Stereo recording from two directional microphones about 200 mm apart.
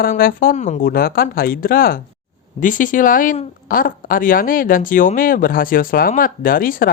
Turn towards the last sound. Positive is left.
turn(degrees=45)  # may be behind; listen again after turning